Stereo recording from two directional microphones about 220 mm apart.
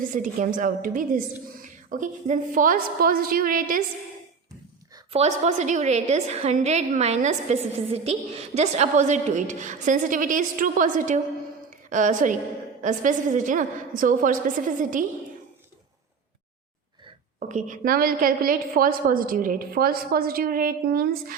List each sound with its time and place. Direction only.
0.0 s a woman's voice: 40° right (ahead or behind)
5.1 s a woman's voice: 30° right (ahead or behind)
17.5 s a woman's voice: 35° right (ahead or behind)